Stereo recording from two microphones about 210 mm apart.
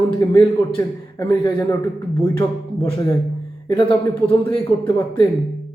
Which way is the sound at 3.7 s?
25° left (ahead or behind).